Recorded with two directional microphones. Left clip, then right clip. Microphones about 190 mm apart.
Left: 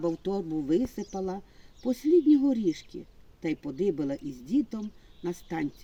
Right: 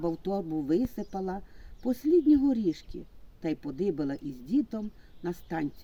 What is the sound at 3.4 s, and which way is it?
Speech, 20° right (ahead or behind).